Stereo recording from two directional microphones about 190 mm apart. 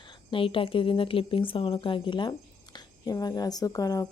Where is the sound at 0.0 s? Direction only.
25° left (ahead or behind).